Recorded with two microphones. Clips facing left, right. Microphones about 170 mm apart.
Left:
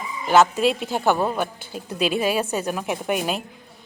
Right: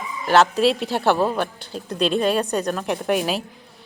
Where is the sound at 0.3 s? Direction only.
Centre (ahead or behind).